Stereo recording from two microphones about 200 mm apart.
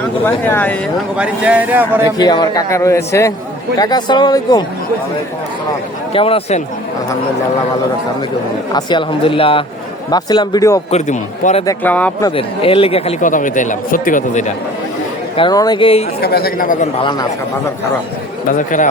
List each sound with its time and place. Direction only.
0.4 s a man's voice: 10° left (ahead or behind)
1.1 s a man's voice: 5° right (ahead or behind)
2.1 s a man's voice: 20° left (ahead or behind)
6.1 s speech: 30° left (ahead or behind)
8.7 s speech: 25° left (ahead or behind)
10.9 s speech: 35° left (ahead or behind)
11.6 s a man's voice: 15° left (ahead or behind)
12.4 s speech: 30° left (ahead or behind)
15.4 s speech: 20° left (ahead or behind)
16.2 s speech: 50° left (ahead or behind)
17.0 s speech: 20° left (ahead or behind)
18.7 s speech: 40° left (ahead or behind)